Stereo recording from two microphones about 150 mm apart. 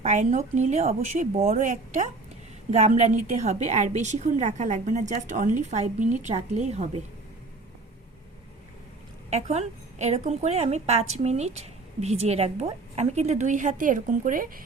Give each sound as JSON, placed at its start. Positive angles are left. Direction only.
{"t": 0.0, "sound": "a woman's voice", "side_deg": -50}
{"t": 9.3, "sound": "a woman's voice", "side_deg": -45}